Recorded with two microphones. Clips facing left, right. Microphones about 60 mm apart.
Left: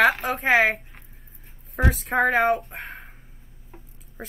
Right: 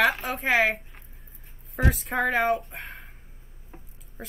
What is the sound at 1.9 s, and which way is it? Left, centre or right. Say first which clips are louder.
Speech: left 5 dB; centre.